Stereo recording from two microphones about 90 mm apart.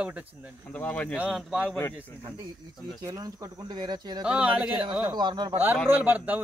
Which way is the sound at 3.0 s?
40° right (ahead or behind).